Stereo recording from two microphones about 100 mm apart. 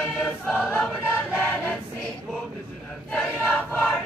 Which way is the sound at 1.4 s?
15° left (ahead or behind).